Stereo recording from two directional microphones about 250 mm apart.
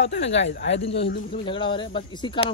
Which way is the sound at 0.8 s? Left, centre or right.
Left.